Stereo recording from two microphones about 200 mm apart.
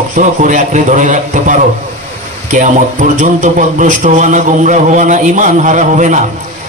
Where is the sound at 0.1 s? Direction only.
40° right (ahead or behind).